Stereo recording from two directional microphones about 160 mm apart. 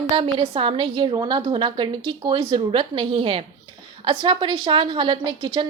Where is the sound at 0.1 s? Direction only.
30° right (ahead or behind).